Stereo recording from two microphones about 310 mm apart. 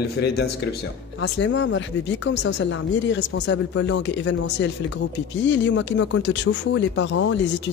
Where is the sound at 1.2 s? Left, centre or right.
Left.